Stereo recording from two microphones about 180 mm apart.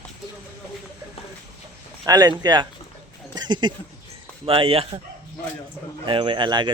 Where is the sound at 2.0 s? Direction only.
20° right (ahead or behind).